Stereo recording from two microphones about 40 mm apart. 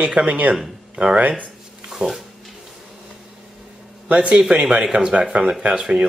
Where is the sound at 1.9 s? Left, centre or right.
Centre.